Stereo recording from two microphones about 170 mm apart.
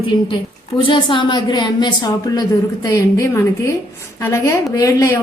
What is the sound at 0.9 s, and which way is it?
A woman's voice, 30° left (ahead or behind).